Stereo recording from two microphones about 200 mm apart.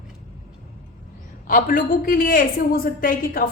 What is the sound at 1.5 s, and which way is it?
A woman's voice, 40° left (ahead or behind).